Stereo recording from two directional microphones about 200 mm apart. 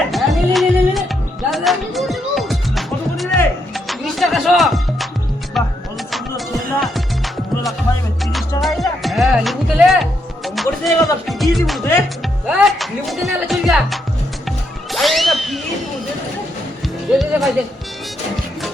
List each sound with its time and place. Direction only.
0.1 s music: centre (ahead or behind)
7.9 s music: 15° left (ahead or behind)
8.2 s music: centre (ahead or behind)
14.9 s a sound: centre (ahead or behind)
17.1 s music: centre (ahead or behind)